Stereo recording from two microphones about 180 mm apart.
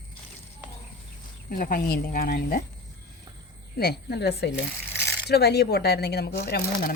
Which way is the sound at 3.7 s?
60° left (ahead or behind).